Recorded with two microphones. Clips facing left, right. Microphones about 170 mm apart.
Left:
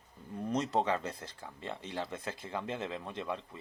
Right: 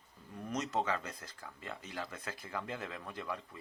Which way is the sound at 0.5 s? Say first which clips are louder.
Left 4 dB; 30° left (ahead or behind).